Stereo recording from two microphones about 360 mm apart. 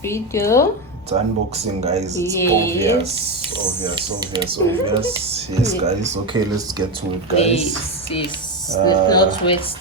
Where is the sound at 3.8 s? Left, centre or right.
Centre.